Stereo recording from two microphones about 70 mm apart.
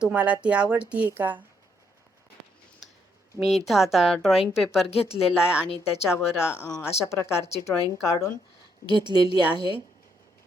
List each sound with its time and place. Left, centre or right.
0.0 s speech: centre
3.7 s a woman's voice: centre
6.1 s speech: left
8.9 s a woman's voice: right